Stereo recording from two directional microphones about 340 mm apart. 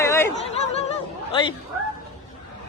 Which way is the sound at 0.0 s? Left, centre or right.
Centre.